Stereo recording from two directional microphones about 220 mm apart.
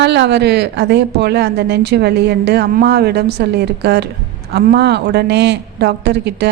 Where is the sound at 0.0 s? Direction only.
50° right (ahead or behind).